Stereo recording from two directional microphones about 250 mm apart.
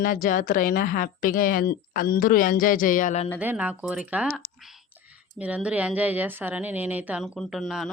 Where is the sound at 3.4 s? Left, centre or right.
Centre.